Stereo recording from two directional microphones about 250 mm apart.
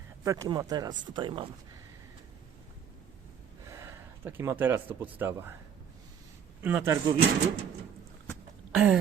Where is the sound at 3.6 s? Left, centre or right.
Centre.